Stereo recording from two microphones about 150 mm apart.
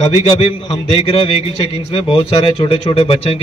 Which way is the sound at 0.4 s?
35° left (ahead or behind).